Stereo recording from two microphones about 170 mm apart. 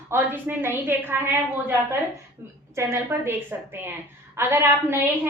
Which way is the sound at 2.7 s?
15° right (ahead or behind).